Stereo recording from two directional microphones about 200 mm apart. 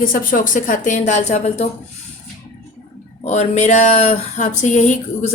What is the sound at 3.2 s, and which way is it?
Speech, 35° left (ahead or behind).